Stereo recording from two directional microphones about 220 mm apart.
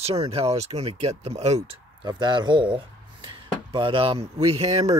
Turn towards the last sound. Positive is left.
turn(degrees=-25)  # may be behind; listen again after turning